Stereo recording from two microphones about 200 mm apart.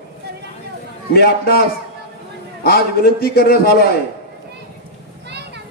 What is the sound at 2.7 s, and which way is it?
Speech, 50° left (ahead or behind).